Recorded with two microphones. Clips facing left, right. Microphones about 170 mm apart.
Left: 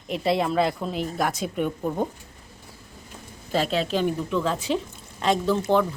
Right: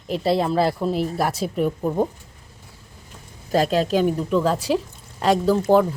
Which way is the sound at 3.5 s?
40° right (ahead or behind).